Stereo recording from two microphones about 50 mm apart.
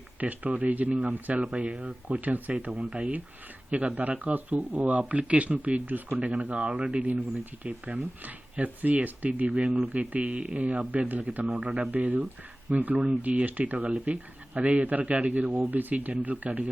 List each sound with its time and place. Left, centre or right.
0.2 s speech: right
6.1 s speech: right